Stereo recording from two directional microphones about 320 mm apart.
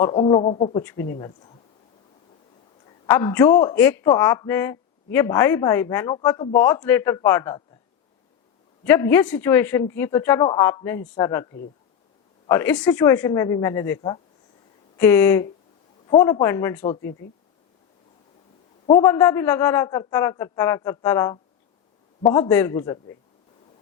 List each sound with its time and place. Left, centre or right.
0.0 s a man's voice: centre
3.1 s a man's voice: centre
8.8 s a man's voice: centre
12.5 s a man's voice: centre
18.9 s a man's voice: centre